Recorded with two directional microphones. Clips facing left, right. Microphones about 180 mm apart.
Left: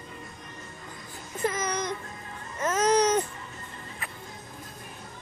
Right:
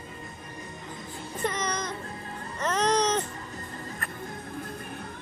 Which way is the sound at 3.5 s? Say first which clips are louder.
Right 5 dB; 40° right (ahead or behind).